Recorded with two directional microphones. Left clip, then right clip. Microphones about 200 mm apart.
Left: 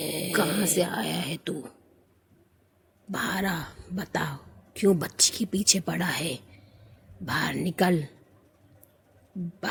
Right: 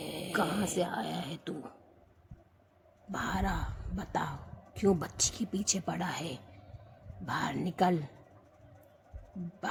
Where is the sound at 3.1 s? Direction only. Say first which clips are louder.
Left 5 dB; 15° left (ahead or behind).